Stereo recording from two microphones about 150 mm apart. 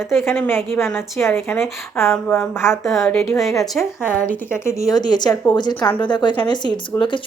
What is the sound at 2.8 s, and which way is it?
A woman's voice, centre (ahead or behind).